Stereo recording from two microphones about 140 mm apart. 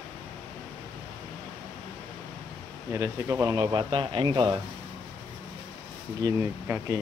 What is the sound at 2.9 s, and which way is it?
Speech, 20° right (ahead or behind).